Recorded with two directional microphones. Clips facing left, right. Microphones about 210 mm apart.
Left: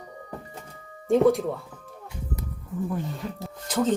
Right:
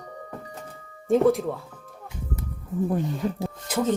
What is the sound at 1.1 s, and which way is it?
Speech, centre (ahead or behind).